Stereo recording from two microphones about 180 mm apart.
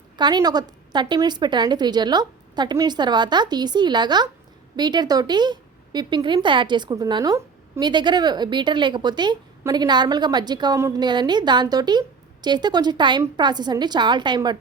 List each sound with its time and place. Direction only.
0.2 s a woman's voice: 25° right (ahead or behind)